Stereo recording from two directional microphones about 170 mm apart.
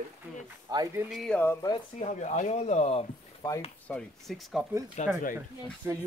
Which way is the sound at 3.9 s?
5° left (ahead or behind).